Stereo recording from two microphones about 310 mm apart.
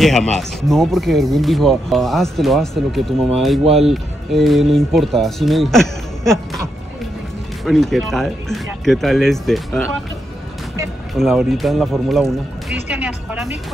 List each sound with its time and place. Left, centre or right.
0.0 s speech: centre
3.6 s speech: centre
3.9 s speech: centre
7.6 s speech: centre
11.1 s speech: centre